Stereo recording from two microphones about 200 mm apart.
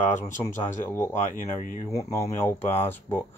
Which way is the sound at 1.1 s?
40° left (ahead or behind).